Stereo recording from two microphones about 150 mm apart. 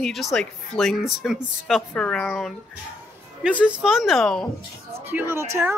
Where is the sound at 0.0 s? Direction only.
Centre (ahead or behind).